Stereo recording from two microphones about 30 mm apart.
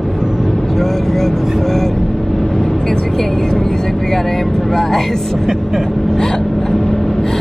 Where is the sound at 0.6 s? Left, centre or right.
Centre.